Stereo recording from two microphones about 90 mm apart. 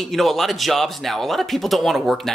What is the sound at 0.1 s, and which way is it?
Speech, centre (ahead or behind).